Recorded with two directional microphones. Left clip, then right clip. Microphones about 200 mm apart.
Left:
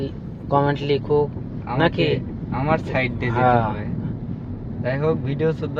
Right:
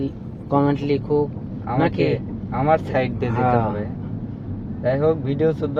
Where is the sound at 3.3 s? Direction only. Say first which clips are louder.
Left 2 dB; centre (ahead or behind).